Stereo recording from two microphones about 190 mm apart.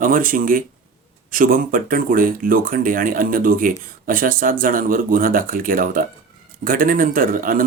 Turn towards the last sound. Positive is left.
turn(degrees=-45)  # may be behind; listen again after turning